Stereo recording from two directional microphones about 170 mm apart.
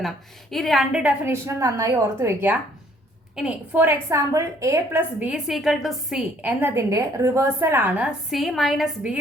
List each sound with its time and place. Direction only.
0.5 s a woman's voice: centre (ahead or behind)